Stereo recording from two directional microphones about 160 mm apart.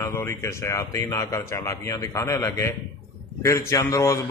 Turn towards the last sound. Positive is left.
turn(degrees=20)  # may be behind; listen again after turning